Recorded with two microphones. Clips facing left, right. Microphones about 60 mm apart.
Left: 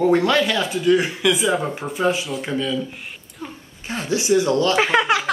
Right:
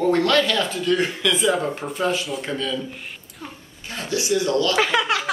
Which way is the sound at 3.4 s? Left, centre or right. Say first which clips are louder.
Left 3 dB; centre.